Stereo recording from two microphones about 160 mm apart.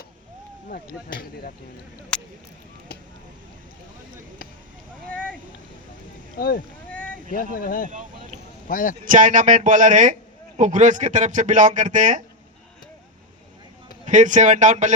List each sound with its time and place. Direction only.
2.1 s speech: 5° left (ahead or behind)
5.0 s a sound: 10° left (ahead or behind)
6.3 s speech: 70° left (ahead or behind)
6.9 s boat: 10° left (ahead or behind)
7.3 s speech: 60° left (ahead or behind)
9.0 s speech: 50° right (ahead or behind)
14.1 s speech: 50° right (ahead or behind)